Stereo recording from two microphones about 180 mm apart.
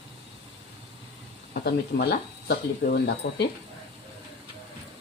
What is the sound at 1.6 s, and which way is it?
Speech, 65° left (ahead or behind).